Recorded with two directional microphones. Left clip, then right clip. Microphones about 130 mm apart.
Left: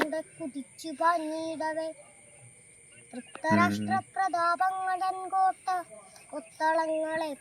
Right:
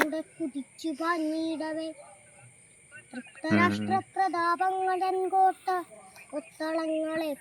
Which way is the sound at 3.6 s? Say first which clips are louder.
Right 1 dB; 40° left (ahead or behind).